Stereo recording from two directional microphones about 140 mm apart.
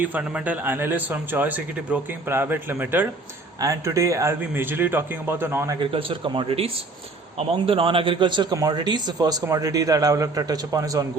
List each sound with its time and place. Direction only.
0.0 s speech: 10° right (ahead or behind)
5.8 s a man's voice: 40° right (ahead or behind); by 11.0 s 25° right (ahead or behind)